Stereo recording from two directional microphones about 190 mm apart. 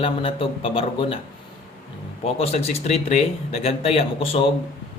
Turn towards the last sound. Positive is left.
turn(degrees=30)  # may be behind; listen again after turning